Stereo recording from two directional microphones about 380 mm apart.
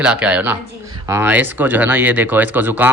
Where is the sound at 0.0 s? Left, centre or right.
Centre.